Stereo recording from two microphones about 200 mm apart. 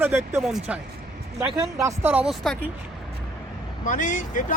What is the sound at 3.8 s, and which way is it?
Speech, 40° left (ahead or behind).